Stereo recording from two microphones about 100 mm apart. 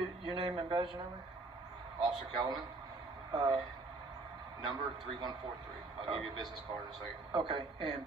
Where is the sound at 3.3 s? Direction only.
45° right (ahead or behind).